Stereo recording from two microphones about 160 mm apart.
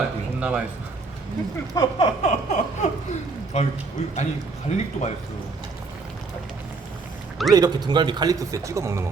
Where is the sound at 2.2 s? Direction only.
45° left (ahead or behind).